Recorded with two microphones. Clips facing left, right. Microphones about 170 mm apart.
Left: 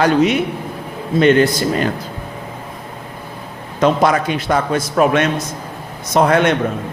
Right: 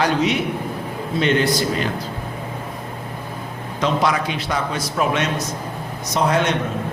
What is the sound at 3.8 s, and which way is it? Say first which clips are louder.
A man's voice: left 6 dB; 50° left (ahead or behind).